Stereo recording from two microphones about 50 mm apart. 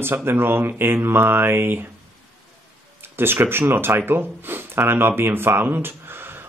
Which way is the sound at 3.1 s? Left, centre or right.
Right.